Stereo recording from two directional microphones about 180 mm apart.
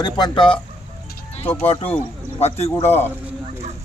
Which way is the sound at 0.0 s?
25° left (ahead or behind).